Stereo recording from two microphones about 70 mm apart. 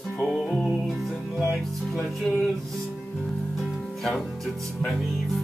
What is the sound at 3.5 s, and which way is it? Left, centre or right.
Speech, centre.